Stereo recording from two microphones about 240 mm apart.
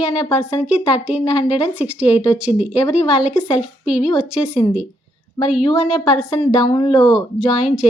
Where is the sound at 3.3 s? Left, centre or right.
Left.